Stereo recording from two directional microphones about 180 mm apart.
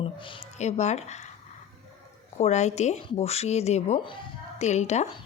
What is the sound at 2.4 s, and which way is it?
Speech, 40° left (ahead or behind).